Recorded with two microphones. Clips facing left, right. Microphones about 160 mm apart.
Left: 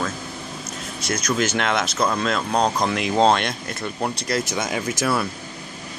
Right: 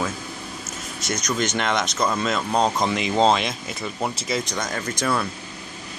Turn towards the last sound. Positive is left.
turn(degrees=5)  # may be behind; listen again after turning